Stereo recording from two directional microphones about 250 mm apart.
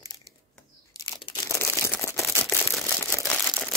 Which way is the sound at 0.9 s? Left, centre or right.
Centre.